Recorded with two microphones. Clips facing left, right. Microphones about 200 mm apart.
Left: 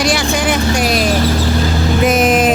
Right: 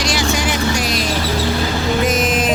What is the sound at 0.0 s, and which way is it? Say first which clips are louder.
Vehicle: left 4 dB; 55° left (ahead or behind).